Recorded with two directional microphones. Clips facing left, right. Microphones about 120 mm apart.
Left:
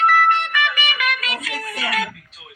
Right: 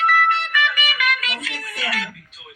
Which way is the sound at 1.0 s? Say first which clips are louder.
Even; 40° left (ahead or behind).